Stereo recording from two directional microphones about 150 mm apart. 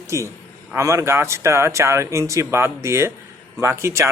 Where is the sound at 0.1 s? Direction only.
20° right (ahead or behind).